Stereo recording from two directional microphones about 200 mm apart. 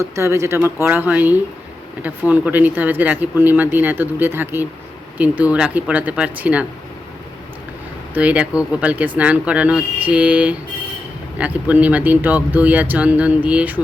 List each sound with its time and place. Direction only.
0.2 s speech: 15° right (ahead or behind)
8.1 s speech: 5° right (ahead or behind)